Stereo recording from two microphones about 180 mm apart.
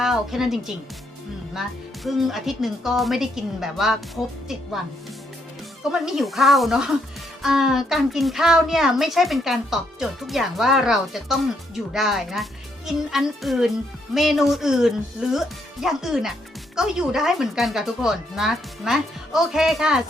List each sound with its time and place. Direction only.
0.0 s speech: centre (ahead or behind)
2.0 s a child's voice: centre (ahead or behind)
5.9 s a child's voice: centre (ahead or behind)